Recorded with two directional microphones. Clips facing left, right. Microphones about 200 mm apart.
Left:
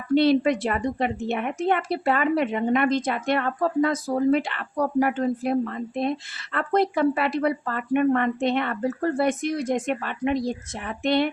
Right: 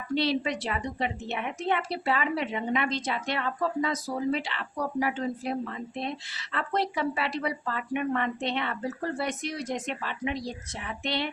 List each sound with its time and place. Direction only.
0.1 s speech: 55° left (ahead or behind)